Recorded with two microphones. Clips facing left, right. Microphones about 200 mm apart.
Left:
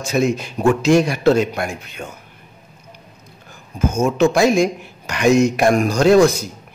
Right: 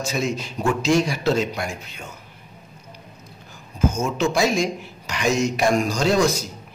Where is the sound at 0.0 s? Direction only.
55° left (ahead or behind).